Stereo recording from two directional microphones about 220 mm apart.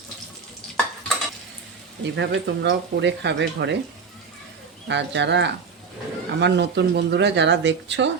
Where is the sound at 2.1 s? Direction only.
55° right (ahead or behind).